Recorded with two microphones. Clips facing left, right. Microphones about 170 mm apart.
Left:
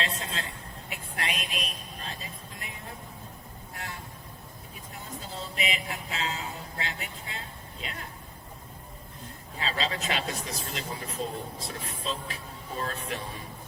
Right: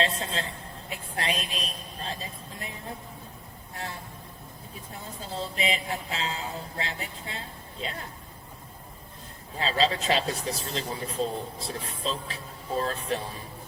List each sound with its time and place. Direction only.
0.0 s a sound: 30° right (ahead or behind)
3.8 s vehicle: 30° right (ahead or behind)
5.0 s music: 30° right (ahead or behind)
9.6 s speech: 30° right (ahead or behind)